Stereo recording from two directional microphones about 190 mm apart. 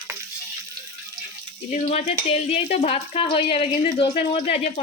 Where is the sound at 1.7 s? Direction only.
35° left (ahead or behind).